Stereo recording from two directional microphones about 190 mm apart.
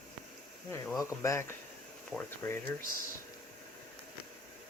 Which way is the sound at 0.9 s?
15° left (ahead or behind).